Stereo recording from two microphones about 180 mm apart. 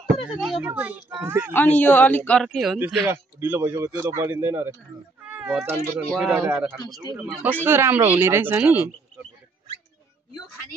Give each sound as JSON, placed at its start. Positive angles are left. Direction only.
{"t": 0.3, "sound": "a woman's voice", "side_deg": -5}
{"t": 1.5, "sound": "a man's voice", "side_deg": 10}
{"t": 3.1, "sound": "a woman's voice", "side_deg": -10}
{"t": 5.2, "sound": "a sound", "side_deg": -5}
{"t": 6.1, "sound": "a man's voice", "side_deg": 0}
{"t": 7.0, "sound": "speech", "side_deg": -25}
{"t": 7.6, "sound": "a woman's voice", "side_deg": -10}